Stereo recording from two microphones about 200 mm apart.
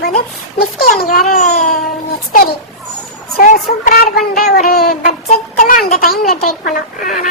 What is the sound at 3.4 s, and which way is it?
Speech, 45° left (ahead or behind).